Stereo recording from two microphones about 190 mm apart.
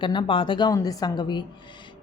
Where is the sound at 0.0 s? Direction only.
25° left (ahead or behind).